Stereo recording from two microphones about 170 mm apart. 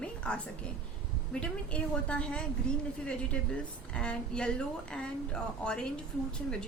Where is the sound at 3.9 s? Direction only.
5° left (ahead or behind).